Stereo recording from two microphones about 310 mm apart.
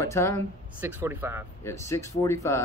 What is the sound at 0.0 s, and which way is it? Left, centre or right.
Speech, centre.